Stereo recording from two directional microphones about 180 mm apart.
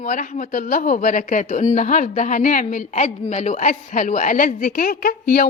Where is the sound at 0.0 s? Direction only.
45° left (ahead or behind).